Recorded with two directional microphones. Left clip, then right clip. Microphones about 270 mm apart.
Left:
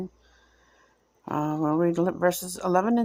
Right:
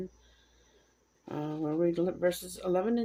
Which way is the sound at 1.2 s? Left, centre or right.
Left.